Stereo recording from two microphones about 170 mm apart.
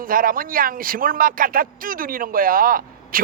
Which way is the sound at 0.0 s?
55° right (ahead or behind).